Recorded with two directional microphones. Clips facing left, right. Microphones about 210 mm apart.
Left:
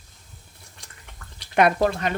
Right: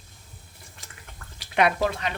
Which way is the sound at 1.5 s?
45° left (ahead or behind).